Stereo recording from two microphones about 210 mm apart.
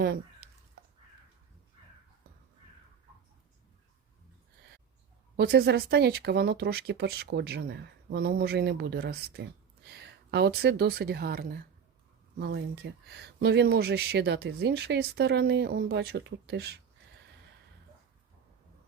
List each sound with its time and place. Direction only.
5.4 s speech: 50° right (ahead or behind)